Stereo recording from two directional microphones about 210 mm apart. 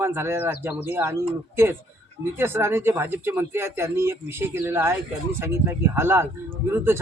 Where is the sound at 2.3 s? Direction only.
10° right (ahead or behind).